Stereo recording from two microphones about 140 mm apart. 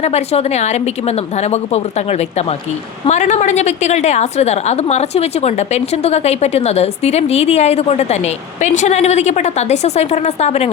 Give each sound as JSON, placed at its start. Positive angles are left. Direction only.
{"t": 0.0, "sound": "a woman's voice", "side_deg": 50}